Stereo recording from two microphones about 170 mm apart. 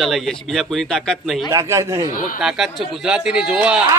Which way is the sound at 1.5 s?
20° right (ahead or behind).